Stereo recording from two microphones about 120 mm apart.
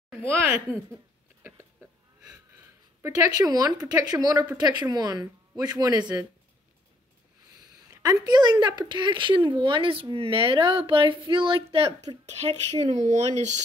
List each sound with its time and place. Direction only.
3.0 s a woman's voice: 35° right (ahead or behind)
7.9 s speech: 30° right (ahead or behind); by 11.9 s 50° right (ahead or behind)
12.3 s speech: 65° right (ahead or behind)
12.9 s speech: 85° right